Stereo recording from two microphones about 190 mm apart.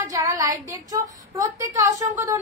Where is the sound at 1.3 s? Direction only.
15° right (ahead or behind).